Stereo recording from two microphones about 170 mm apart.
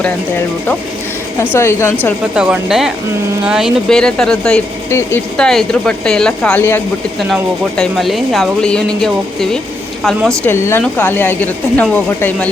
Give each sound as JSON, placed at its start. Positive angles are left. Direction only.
{"t": 0.0, "sound": "speech", "side_deg": 10}
{"t": 2.3, "sound": "speech", "side_deg": -5}
{"t": 5.4, "sound": "speech", "side_deg": 5}
{"t": 7.3, "sound": "speech", "side_deg": 0}
{"t": 10.5, "sound": "speech", "side_deg": 15}